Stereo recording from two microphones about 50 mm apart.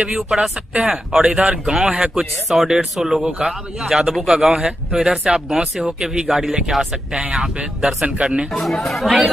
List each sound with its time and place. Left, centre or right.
0.3 s speech: centre
8.8 s speech: centre